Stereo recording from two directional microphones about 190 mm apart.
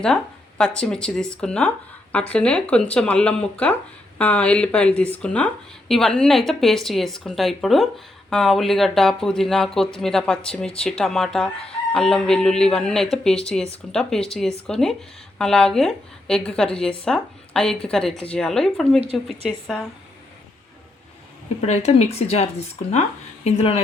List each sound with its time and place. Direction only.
0.6 s speech: 5° left (ahead or behind)
21.6 s a woman's voice: 35° left (ahead or behind)